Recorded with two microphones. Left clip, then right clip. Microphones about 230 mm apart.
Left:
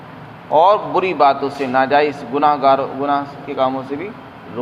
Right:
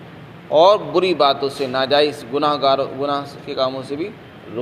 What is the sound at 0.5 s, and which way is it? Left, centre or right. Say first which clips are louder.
A man's voice: even; right.